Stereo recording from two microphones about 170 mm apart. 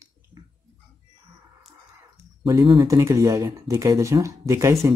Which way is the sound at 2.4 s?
25° right (ahead or behind).